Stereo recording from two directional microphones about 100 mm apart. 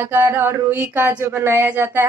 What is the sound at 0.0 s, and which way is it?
A woman's voice, 25° right (ahead or behind).